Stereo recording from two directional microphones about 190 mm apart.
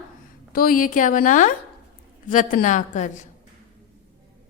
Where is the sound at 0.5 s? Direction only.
50° left (ahead or behind).